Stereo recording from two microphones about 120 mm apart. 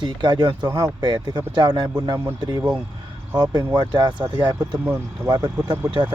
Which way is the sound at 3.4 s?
35° right (ahead or behind).